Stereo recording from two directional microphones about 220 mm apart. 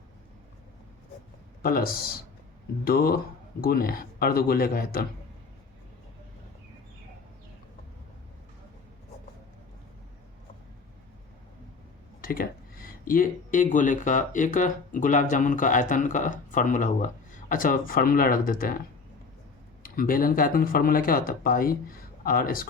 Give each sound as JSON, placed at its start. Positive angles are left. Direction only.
{"t": 1.6, "sound": "speech", "side_deg": 40}
{"t": 12.2, "sound": "speech", "side_deg": 40}
{"t": 19.8, "sound": "speech", "side_deg": 40}